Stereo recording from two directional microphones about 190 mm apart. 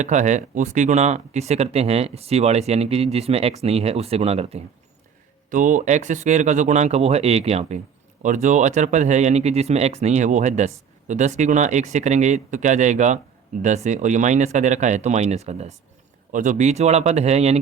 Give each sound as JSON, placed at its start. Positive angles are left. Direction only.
{"t": 0.0, "sound": "speech", "side_deg": -40}